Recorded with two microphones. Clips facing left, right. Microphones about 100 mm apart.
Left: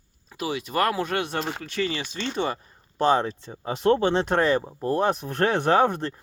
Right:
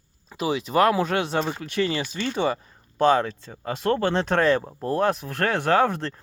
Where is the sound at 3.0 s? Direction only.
15° left (ahead or behind).